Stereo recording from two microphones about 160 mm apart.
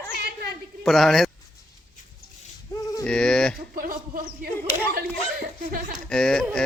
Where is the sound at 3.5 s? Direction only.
65° right (ahead or behind).